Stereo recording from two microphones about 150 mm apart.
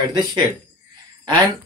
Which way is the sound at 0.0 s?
30° right (ahead or behind).